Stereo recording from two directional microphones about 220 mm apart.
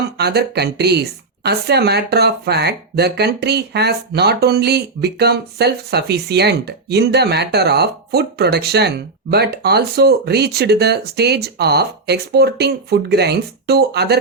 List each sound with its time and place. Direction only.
0.2 s speech: 50° right (ahead or behind)